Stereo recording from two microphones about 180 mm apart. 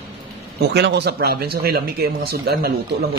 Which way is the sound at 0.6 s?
70° right (ahead or behind).